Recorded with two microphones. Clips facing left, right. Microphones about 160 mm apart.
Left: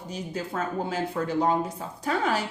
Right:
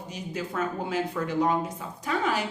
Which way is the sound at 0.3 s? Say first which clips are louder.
Even; 35° left (ahead or behind).